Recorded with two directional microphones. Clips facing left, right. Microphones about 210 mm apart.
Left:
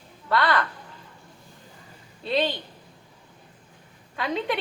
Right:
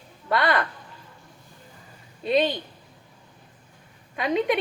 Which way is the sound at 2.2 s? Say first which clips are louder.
Right 3 dB; 20° right (ahead or behind).